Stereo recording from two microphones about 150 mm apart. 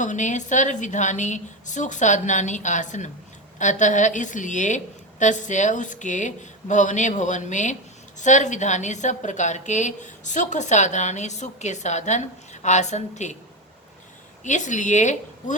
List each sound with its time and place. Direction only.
0.0 s a woman's voice: 55° left (ahead or behind)
14.4 s a woman's voice: 55° left (ahead or behind)